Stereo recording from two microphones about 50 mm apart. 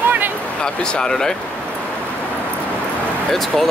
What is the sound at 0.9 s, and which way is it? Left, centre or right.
Speech, centre.